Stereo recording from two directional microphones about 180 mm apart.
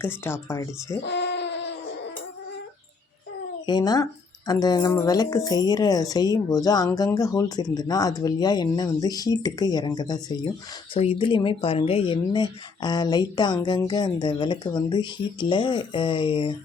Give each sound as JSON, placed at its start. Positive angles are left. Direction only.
{"t": 0.0, "sound": "speech", "side_deg": 15}
{"t": 1.0, "sound": "a sound", "side_deg": 75}
{"t": 3.7, "sound": "speech", "side_deg": 20}